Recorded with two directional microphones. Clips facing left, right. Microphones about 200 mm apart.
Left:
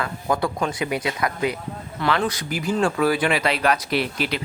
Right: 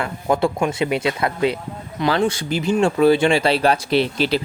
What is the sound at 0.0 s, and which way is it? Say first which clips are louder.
Speech: right 4 dB; 25° right (ahead or behind).